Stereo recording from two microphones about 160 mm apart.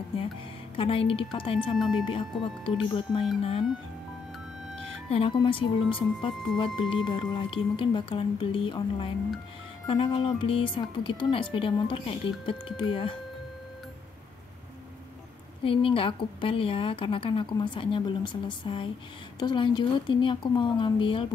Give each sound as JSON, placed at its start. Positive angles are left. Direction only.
{"t": 0.7, "sound": "speech", "side_deg": 35}
{"t": 1.8, "sound": "speech", "side_deg": 0}
{"t": 2.0, "sound": "speech", "side_deg": 30}
{"t": 5.1, "sound": "speech", "side_deg": 35}
{"t": 15.6, "sound": "speech", "side_deg": 35}